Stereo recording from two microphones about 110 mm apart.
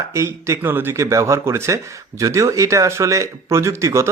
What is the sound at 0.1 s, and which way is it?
Speech, 25° right (ahead or behind).